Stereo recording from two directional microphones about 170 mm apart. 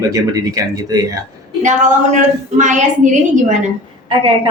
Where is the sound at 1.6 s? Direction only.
45° right (ahead or behind).